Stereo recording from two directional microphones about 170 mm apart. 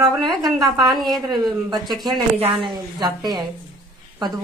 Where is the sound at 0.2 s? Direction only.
25° right (ahead or behind).